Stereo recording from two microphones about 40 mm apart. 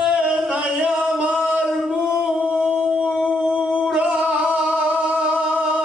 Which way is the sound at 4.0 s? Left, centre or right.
Right.